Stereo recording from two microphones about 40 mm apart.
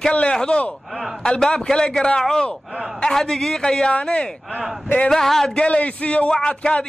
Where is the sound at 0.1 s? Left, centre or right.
Left.